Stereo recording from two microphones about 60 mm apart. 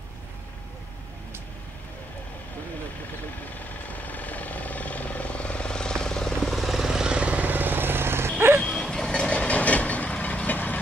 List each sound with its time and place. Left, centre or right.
3.9 s vehicle: left; by 8.3 s right
8.5 s vehicle: centre
9.1 s vehicle: centre